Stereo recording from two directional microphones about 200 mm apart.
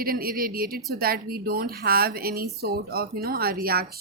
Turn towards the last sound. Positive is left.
turn(degrees=-50)  # may be behind; listen again after turning